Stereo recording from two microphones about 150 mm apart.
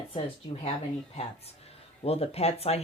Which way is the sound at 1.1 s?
40° left (ahead or behind).